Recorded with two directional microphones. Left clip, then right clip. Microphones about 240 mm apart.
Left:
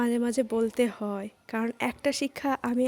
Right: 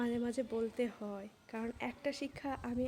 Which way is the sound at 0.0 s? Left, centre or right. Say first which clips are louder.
Left 10 dB; left.